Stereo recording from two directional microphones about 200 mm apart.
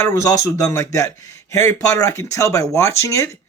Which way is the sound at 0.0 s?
15° left (ahead or behind).